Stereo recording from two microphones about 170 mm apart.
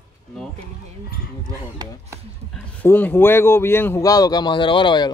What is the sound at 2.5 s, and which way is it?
Speech, 10° left (ahead or behind).